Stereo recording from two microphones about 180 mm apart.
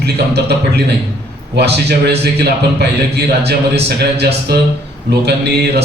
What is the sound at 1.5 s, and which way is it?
A man's voice, 65° right (ahead or behind).